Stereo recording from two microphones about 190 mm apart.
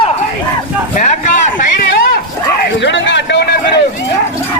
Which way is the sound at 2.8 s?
70° left (ahead or behind).